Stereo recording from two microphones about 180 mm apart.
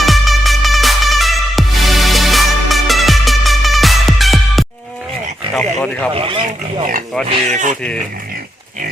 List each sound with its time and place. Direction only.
0.0 s music: centre (ahead or behind)
5.5 s a sound: 5° left (ahead or behind)
6.1 s speech: 30° right (ahead or behind)
7.3 s speech: 45° right (ahead or behind)